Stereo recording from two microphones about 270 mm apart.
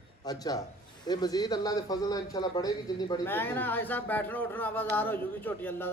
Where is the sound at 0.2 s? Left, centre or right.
Centre.